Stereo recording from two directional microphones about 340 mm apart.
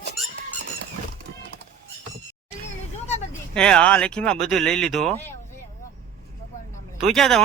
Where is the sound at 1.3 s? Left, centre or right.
Right.